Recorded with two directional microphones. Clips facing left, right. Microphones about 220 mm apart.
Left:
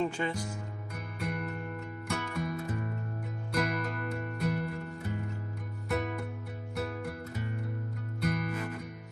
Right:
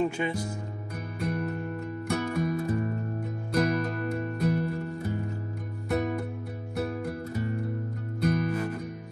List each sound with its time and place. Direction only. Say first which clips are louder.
0.0 s music: right 4 dB; 15° right (ahead or behind)
1.2 s music: right 6 dB; 35° right (ahead or behind)
8.2 s music: right 7 dB; 35° right (ahead or behind)